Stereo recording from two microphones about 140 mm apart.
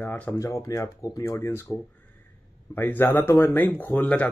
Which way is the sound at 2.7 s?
15° left (ahead or behind).